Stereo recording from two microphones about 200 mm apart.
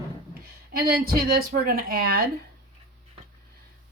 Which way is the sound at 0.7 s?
50° right (ahead or behind).